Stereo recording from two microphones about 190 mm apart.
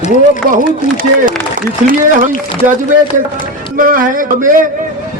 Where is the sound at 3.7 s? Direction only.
45° right (ahead or behind).